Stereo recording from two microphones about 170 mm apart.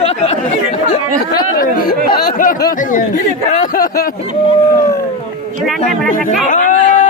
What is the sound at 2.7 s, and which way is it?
Speech, 50° left (ahead or behind).